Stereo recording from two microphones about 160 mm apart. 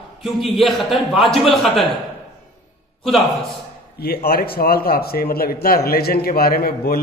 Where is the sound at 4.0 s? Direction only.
70° left (ahead or behind).